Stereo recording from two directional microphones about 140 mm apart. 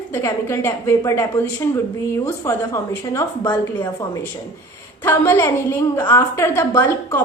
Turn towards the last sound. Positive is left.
turn(degrees=20)  # may be behind; listen again after turning